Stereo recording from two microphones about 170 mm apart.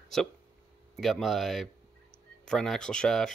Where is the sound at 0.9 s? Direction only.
Centre (ahead or behind).